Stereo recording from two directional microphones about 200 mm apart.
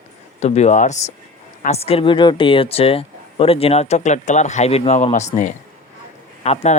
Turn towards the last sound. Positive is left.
turn(degrees=30)  # may be behind; listen again after turning